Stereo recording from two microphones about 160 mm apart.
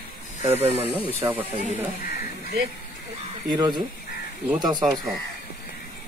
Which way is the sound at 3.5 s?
25° right (ahead or behind).